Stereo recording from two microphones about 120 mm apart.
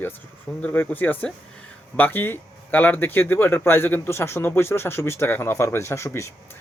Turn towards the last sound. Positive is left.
turn(degrees=25)  # may be behind; listen again after turning